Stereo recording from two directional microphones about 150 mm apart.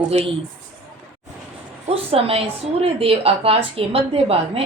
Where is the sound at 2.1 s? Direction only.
40° right (ahead or behind).